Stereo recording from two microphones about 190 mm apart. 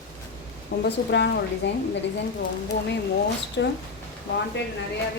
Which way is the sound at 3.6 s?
70° left (ahead or behind).